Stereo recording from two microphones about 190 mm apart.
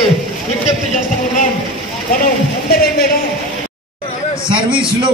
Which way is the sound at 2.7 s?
55° left (ahead or behind).